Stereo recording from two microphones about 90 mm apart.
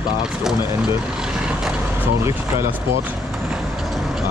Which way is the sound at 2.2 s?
30° right (ahead or behind).